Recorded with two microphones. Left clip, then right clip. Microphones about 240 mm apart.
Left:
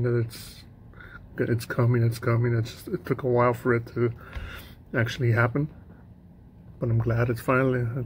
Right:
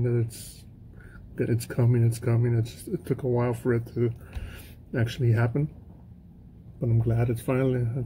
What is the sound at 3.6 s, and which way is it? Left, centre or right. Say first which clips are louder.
Speech: left 2 dB; centre.